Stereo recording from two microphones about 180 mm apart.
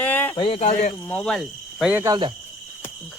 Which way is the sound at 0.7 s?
45° left (ahead or behind).